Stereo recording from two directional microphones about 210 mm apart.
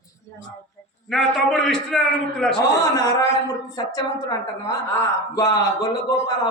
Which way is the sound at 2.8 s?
15° left (ahead or behind).